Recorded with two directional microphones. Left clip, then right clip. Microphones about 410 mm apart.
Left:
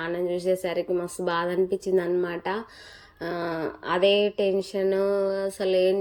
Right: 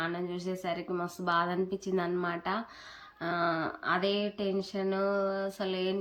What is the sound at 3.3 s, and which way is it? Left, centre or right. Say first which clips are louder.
Speech: even; right.